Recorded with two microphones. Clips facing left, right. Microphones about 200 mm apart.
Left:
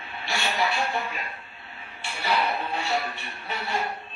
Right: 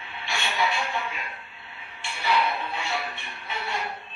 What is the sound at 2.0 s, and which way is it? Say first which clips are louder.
Music: right 1 dB; 40° left (ahead or behind).